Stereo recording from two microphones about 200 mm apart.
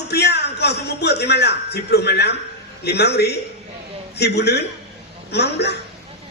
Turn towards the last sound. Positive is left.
turn(degrees=55)  # may be behind; listen again after turning